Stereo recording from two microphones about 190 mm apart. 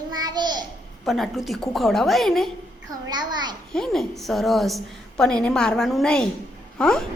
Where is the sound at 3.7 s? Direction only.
Centre (ahead or behind).